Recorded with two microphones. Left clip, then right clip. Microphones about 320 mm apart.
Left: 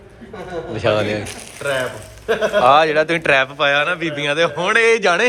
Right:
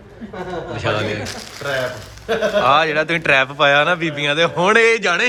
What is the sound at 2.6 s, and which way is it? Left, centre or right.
A man's voice, centre.